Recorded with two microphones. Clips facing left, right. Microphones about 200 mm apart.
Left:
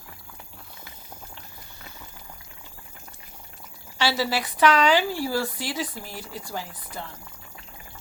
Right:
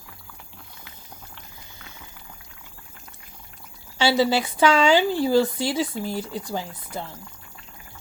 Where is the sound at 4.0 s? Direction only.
25° right (ahead or behind).